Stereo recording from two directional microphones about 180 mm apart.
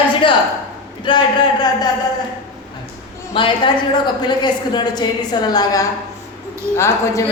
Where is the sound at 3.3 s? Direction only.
30° left (ahead or behind).